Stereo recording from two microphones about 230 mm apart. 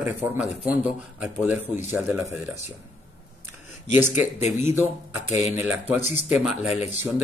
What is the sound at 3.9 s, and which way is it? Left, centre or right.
Speech, centre.